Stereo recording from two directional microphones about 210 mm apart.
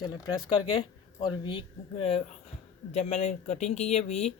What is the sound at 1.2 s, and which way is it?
Speech, 25° left (ahead or behind).